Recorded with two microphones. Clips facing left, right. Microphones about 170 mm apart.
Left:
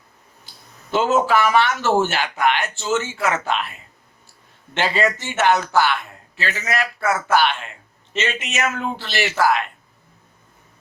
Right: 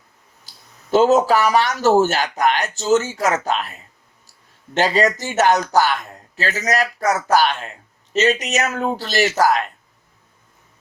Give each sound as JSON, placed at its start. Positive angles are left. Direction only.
{"t": 0.4, "sound": "speech", "side_deg": -40}